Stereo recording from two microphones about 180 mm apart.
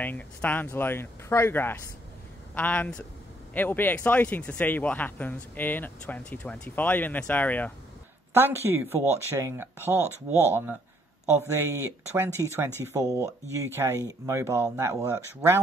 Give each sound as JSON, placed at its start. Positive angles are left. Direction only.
{"t": 0.0, "sound": "speech", "side_deg": 10}
{"t": 8.3, "sound": "speech", "side_deg": -10}